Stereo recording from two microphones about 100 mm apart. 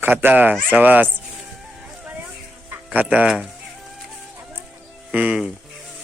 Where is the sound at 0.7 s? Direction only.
15° right (ahead or behind).